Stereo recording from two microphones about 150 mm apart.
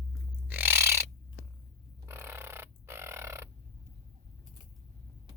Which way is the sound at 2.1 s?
15° right (ahead or behind).